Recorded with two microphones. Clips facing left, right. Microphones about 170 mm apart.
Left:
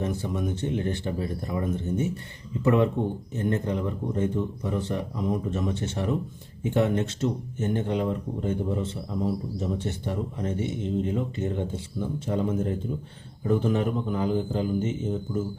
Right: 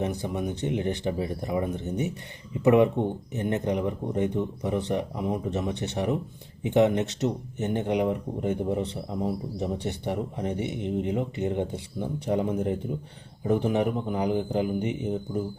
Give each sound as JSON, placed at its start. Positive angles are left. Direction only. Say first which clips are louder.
{"t": 0.0, "sound": "speech", "louder": "even", "side_deg": -15}